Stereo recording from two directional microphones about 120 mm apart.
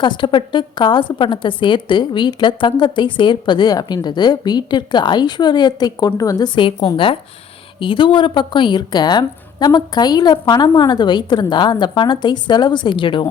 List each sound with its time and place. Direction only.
0.0 s a woman's voice: 40° left (ahead or behind)